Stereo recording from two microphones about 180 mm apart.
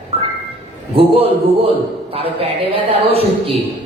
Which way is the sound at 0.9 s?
30° right (ahead or behind).